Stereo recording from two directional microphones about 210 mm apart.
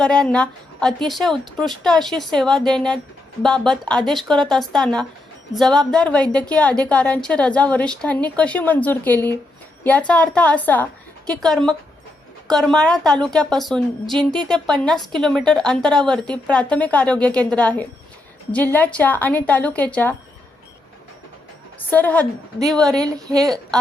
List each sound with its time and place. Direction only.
0.0 s a woman's voice: 5° left (ahead or behind)
21.8 s a woman's voice: 10° left (ahead or behind)
23.0 s a woman's voice: 15° right (ahead or behind)